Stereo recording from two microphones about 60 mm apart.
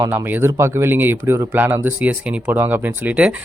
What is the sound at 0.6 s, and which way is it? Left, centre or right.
Speech, right.